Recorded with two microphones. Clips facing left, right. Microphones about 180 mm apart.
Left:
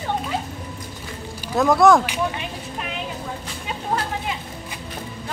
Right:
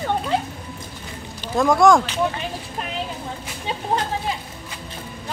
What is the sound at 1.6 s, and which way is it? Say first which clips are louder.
Speech: even; centre (ahead or behind).